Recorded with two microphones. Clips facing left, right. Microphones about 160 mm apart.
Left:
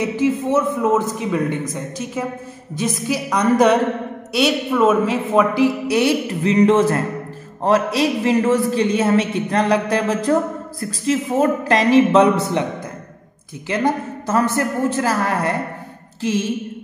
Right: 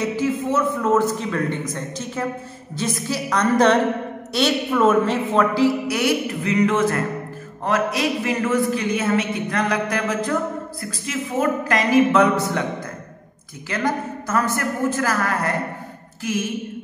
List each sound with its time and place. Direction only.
0.1 s a woman's voice: 20° left (ahead or behind)
2.7 s a woman's voice: 15° left (ahead or behind)
13.7 s a woman's voice: 25° left (ahead or behind)